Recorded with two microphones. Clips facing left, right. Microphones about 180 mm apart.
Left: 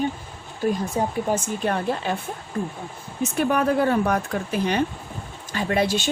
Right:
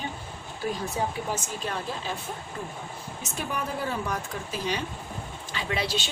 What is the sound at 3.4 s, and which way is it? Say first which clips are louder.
Speech: left 11 dB; 65° left (ahead or behind).